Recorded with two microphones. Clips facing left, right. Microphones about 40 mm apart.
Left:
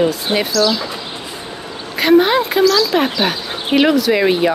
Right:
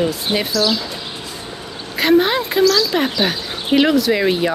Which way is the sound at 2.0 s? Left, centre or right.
Centre.